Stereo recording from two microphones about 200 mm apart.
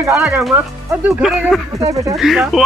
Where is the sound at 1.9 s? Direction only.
15° right (ahead or behind).